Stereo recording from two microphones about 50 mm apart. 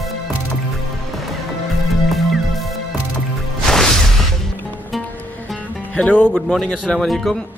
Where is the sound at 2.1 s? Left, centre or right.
Centre.